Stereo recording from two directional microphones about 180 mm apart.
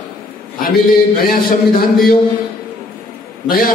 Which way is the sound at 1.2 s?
55° left (ahead or behind).